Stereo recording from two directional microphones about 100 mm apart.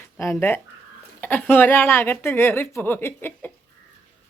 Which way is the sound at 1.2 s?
20° left (ahead or behind).